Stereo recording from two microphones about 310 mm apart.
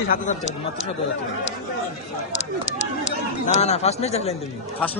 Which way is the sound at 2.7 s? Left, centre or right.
Left.